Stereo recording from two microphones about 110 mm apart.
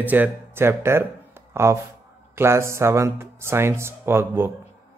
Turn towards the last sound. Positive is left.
turn(degrees=-20)  # may be behind; listen again after turning